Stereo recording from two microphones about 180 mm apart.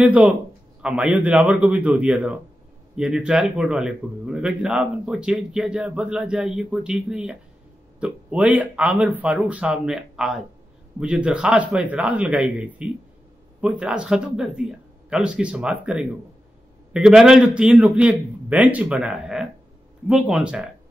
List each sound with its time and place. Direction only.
0.0 s speech: 10° right (ahead or behind)